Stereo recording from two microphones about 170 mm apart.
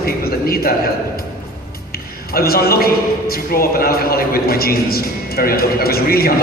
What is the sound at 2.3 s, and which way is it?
A man's voice, 60° left (ahead or behind).